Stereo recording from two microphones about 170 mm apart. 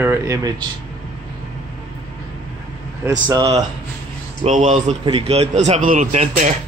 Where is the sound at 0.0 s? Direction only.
15° right (ahead or behind).